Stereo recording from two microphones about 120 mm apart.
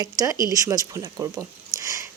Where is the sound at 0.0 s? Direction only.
30° right (ahead or behind).